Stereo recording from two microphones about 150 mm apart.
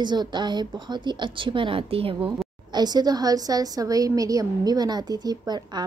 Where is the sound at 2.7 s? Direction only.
25° right (ahead or behind).